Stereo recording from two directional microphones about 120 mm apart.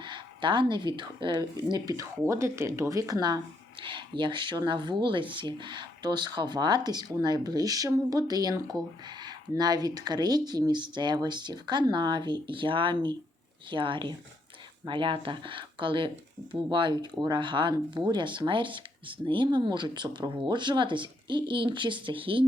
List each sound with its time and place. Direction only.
0.0 s speech: 40° right (ahead or behind)